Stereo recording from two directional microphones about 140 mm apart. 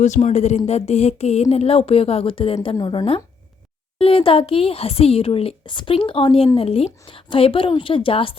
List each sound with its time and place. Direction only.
0.0 s a woman's voice: 55° left (ahead or behind); by 8.4 s 40° left (ahead or behind)